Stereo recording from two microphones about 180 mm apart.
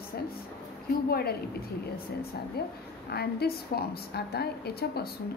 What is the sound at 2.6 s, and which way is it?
A woman's voice, 60° left (ahead or behind).